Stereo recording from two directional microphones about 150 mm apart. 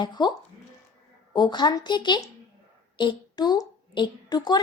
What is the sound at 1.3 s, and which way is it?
A woman's voice, 30° left (ahead or behind).